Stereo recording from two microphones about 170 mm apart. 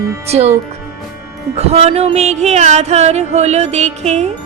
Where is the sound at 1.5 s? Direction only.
35° right (ahead or behind).